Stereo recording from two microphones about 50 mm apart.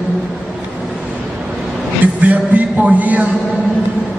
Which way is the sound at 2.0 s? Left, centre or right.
Right.